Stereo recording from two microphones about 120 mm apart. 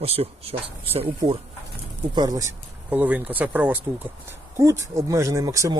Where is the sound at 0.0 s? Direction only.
55° right (ahead or behind).